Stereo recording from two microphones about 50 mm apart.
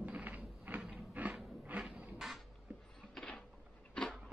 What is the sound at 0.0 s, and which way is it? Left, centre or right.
Mechanisms, right.